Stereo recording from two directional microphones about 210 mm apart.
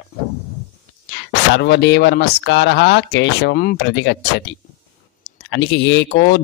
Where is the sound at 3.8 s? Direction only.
60° left (ahead or behind).